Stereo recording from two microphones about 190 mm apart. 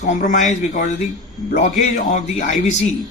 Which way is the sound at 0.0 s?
40° left (ahead or behind).